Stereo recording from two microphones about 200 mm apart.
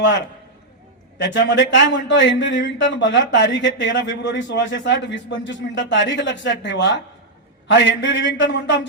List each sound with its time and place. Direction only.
1.2 s speech: 65° left (ahead or behind)